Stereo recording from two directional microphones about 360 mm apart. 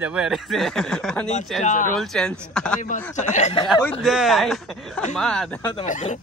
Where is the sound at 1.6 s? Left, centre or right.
Left.